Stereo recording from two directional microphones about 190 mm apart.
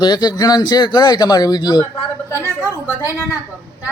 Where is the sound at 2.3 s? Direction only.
10° right (ahead or behind).